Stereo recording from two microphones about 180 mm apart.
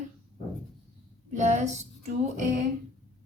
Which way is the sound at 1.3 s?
40° right (ahead or behind).